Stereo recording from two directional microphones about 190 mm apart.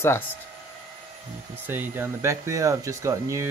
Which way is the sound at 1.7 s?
10° right (ahead or behind).